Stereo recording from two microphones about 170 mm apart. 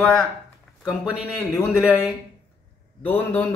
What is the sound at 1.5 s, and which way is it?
A man's voice, 5° left (ahead or behind).